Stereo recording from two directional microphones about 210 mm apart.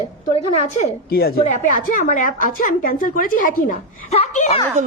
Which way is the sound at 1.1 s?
45° left (ahead or behind).